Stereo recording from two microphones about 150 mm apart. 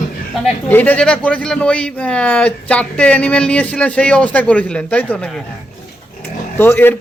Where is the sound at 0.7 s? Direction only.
10° left (ahead or behind).